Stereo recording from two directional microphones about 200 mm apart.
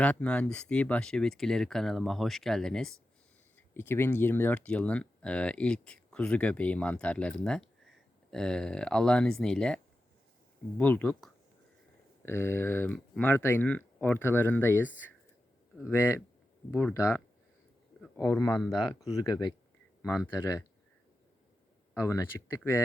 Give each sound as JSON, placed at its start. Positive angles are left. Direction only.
{"t": 0.0, "sound": "speech", "side_deg": 5}
{"t": 18.3, "sound": "speech", "side_deg": 15}
{"t": 21.9, "sound": "speech", "side_deg": 15}